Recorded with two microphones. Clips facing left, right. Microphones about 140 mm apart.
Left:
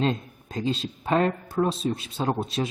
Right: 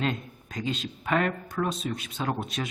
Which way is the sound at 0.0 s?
30° left (ahead or behind).